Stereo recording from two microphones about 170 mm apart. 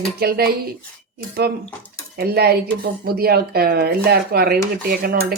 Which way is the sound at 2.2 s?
65° right (ahead or behind).